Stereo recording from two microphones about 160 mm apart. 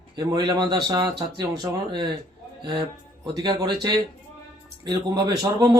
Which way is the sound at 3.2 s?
30° right (ahead or behind).